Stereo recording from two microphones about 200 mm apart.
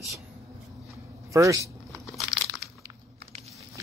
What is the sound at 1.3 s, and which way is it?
Speech, 15° right (ahead or behind).